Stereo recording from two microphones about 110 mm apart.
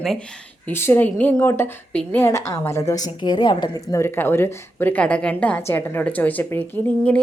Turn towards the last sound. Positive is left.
turn(degrees=15)  # may be behind; listen again after turning